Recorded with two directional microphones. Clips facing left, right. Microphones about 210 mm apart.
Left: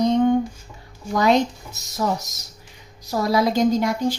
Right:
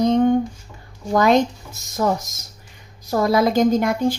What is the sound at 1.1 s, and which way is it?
Speech, 50° right (ahead or behind).